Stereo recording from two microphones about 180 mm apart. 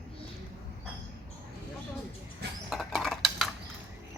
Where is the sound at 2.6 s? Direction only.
Centre (ahead or behind).